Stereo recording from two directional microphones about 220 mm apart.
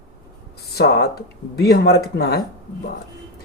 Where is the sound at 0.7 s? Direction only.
45° left (ahead or behind).